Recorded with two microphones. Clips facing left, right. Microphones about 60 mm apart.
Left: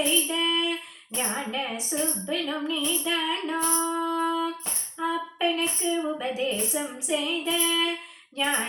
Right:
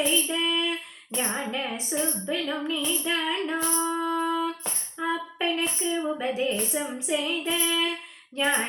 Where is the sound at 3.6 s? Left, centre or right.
Centre.